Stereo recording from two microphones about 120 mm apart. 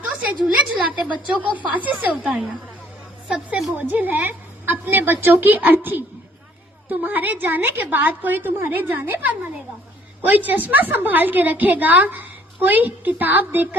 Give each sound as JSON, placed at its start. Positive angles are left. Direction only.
{"t": 0.4, "sound": "a woman's voice", "side_deg": -10}